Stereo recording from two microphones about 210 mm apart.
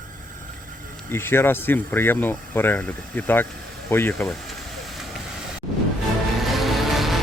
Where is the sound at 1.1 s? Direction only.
10° left (ahead or behind).